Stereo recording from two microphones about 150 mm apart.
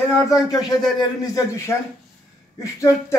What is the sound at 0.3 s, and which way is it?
Speech, 25° left (ahead or behind).